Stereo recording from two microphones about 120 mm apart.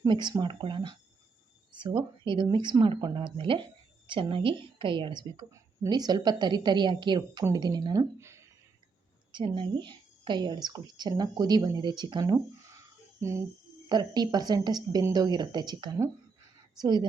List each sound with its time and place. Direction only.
0.1 s a woman's voice: 40° right (ahead or behind)
5.5 s a woman's voice: 30° right (ahead or behind)
8.2 s a sound: 25° right (ahead or behind)
9.3 s a woman's voice: 40° right (ahead or behind)
12.2 s a sound: 25° right (ahead or behind)
13.8 s a woman's voice: 35° right (ahead or behind)